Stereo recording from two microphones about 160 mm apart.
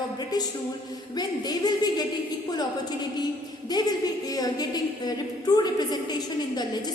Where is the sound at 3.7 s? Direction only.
25° left (ahead or behind).